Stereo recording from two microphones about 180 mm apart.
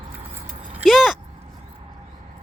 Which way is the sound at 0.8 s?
Centre (ahead or behind).